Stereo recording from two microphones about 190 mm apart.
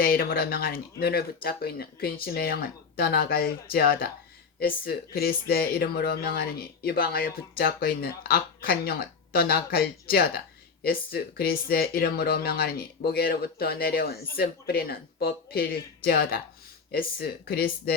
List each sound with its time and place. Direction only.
0.0 s speech: 50° left (ahead or behind)